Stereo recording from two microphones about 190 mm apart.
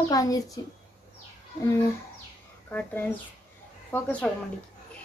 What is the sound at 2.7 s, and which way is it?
Speech, 10° left (ahead or behind).